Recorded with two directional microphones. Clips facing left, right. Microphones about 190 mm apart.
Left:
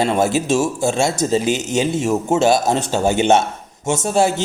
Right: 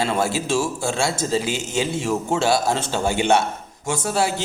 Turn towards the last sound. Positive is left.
turn(degrees=25)  # may be behind; listen again after turning